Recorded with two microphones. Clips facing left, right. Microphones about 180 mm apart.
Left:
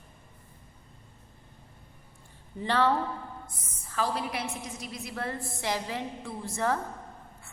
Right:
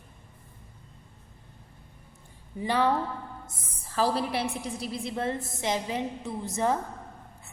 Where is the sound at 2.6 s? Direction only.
15° right (ahead or behind).